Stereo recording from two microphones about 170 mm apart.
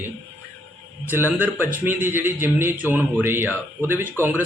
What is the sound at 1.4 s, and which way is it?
Speech, 10° right (ahead or behind).